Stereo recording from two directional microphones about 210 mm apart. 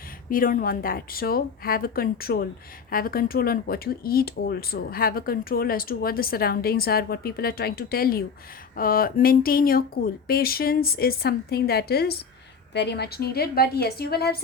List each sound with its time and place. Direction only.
0.3 s speech: 40° left (ahead or behind)